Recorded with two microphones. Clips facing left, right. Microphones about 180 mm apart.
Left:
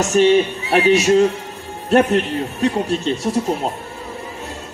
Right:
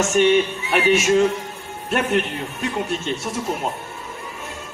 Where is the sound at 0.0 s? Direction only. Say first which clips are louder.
Left 3 dB; 35° left (ahead or behind).